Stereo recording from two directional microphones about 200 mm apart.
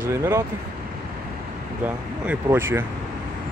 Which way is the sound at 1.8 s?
10° right (ahead or behind).